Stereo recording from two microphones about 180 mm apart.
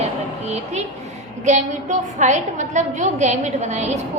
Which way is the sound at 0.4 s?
40° right (ahead or behind).